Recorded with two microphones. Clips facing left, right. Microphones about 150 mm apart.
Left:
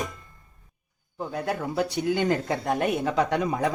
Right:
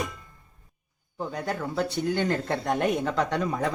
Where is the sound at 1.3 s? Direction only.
10° left (ahead or behind).